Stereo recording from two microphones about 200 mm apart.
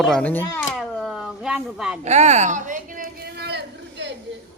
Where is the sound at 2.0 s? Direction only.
35° right (ahead or behind); by 4.1 s 60° right (ahead or behind).